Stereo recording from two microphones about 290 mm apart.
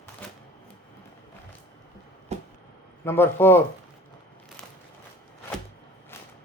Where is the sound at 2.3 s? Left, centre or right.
Right.